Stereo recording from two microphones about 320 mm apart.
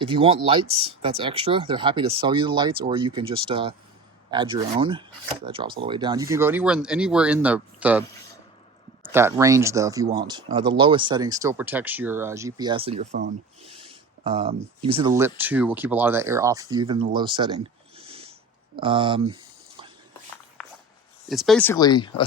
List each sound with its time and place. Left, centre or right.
0.0 s speech: centre
9.1 s speech: centre
14.3 s speech: centre
17.2 s a sound: centre
18.8 s speech: centre
21.2 s speech: centre